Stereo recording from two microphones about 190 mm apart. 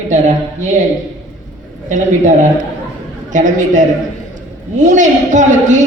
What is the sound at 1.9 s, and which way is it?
A woman's voice, 40° right (ahead or behind).